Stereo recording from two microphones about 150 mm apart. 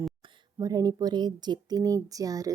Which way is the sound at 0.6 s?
25° right (ahead or behind).